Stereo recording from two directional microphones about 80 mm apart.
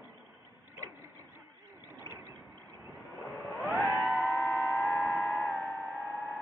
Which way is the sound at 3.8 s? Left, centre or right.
Centre.